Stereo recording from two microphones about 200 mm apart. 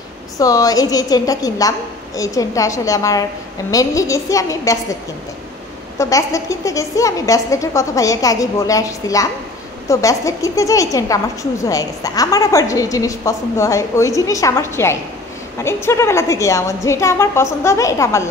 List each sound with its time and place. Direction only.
0.4 s a woman's voice: 15° left (ahead or behind)
5.9 s a woman's voice: 15° left (ahead or behind)